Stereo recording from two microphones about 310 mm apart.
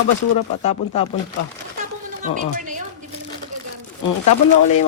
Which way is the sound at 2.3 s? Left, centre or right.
Right.